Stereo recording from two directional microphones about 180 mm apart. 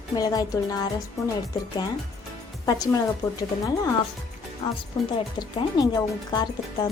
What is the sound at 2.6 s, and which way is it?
Speech, 20° left (ahead or behind).